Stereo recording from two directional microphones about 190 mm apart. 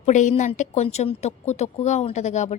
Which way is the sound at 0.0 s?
40° left (ahead or behind).